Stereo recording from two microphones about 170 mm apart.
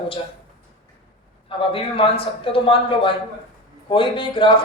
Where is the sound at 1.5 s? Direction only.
30° left (ahead or behind).